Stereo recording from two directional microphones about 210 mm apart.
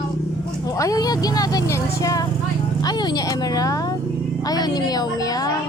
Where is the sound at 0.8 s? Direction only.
15° left (ahead or behind).